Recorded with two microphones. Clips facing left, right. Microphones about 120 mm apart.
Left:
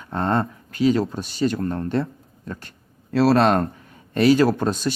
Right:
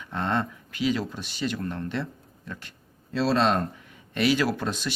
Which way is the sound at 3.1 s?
65° left (ahead or behind).